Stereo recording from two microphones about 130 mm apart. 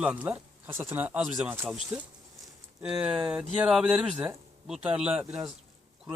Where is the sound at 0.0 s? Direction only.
10° right (ahead or behind).